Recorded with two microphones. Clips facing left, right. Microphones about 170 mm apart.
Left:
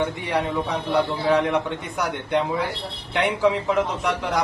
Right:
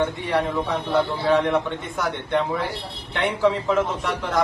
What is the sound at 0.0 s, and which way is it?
A man's voice, 15° left (ahead or behind).